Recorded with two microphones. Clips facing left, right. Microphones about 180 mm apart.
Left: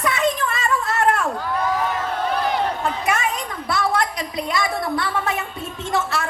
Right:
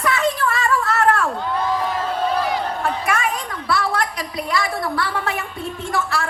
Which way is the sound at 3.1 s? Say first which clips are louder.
Even; 20° left (ahead or behind).